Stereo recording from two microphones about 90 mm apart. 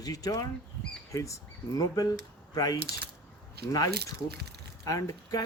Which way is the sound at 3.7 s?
40° left (ahead or behind).